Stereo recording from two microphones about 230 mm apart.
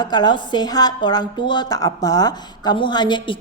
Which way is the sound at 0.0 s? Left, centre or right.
Centre.